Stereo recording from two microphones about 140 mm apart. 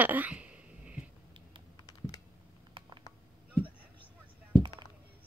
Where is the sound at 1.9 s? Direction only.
25° left (ahead or behind).